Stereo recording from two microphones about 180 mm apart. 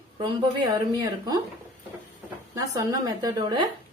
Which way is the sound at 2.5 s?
20° right (ahead or behind).